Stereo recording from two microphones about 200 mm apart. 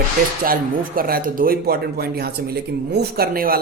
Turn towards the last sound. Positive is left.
turn(degrees=-50)  # may be behind; listen again after turning